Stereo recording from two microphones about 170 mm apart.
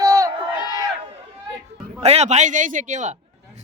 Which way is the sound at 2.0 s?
40° right (ahead or behind).